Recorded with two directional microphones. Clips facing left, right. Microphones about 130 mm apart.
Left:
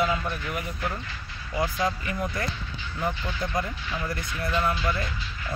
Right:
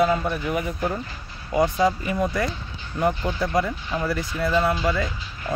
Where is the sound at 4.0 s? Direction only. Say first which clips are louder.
Right 7 dB; 90° right.